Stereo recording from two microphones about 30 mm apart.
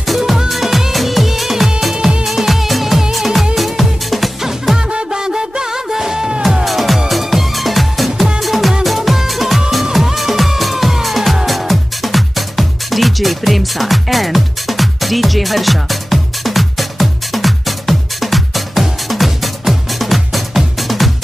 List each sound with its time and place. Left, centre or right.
0.5 s music: centre
4.7 s music: right
6.6 s music: centre